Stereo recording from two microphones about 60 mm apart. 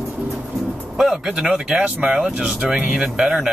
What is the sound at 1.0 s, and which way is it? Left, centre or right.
Speech, centre.